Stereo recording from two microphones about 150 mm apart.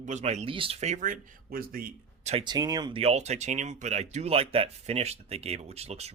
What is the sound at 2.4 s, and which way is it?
Speech, 25° right (ahead or behind).